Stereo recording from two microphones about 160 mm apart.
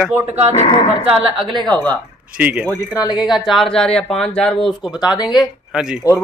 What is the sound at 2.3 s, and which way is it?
Speech, 10° right (ahead or behind).